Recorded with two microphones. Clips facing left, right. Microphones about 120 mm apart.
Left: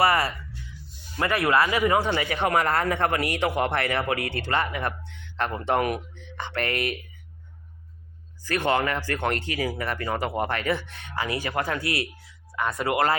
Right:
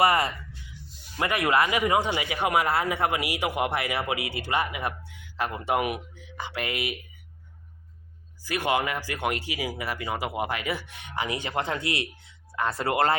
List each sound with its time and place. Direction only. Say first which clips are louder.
0.0 s speech: even; 20° right (ahead or behind)
8.4 s speech: left 2 dB; 10° right (ahead or behind); by 13.1 s 30° right (ahead or behind)